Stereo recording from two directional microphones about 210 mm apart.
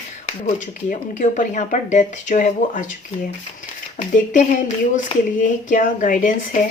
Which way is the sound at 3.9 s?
35° left (ahead or behind).